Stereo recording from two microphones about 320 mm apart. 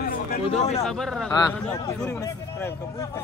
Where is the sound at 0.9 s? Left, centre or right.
Centre.